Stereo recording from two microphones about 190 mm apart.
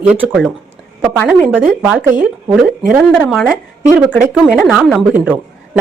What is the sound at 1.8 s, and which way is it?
A man's voice, 5° right (ahead or behind).